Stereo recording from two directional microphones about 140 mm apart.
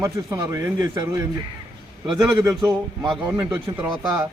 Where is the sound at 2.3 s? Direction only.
25° right (ahead or behind).